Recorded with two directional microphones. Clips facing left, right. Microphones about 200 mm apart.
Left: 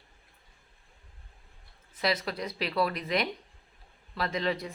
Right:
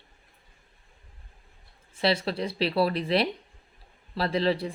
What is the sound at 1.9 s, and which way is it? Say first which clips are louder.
Speech: right 4 dB; 30° right (ahead or behind).